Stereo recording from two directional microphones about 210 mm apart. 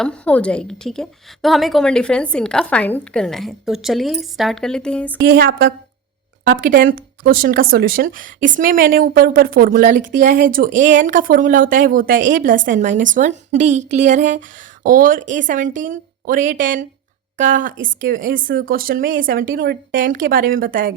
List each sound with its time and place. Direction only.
0.0 s a woman's voice: 5° left (ahead or behind)
6.5 s speech: 40° right (ahead or behind)